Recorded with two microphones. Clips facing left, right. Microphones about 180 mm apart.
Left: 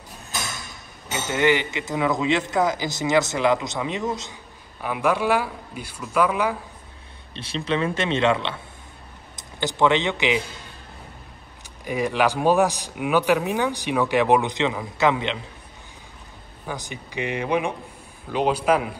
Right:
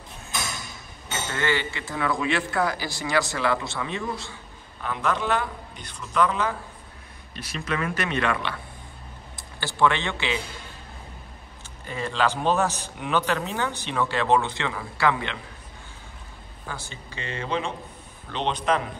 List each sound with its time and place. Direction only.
1.3 s a man's voice: 15° left (ahead or behind)
7.3 s a man's voice: 30° left (ahead or behind)
11.8 s a man's voice: 15° left (ahead or behind)
16.6 s a man's voice: 15° left (ahead or behind)